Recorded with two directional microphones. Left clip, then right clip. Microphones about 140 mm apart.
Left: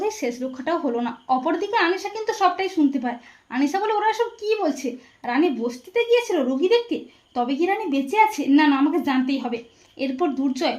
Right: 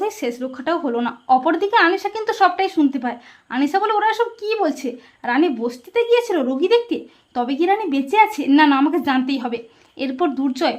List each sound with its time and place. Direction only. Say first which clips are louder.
0.0 s speech: right 2 dB; 25° right (ahead or behind)